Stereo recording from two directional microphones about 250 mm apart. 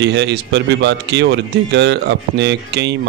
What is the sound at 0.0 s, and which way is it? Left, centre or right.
Speech, right.